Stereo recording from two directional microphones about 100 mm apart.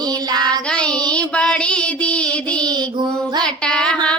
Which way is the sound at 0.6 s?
10° left (ahead or behind).